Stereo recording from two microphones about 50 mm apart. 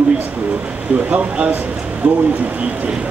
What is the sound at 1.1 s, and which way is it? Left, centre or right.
Speech, right.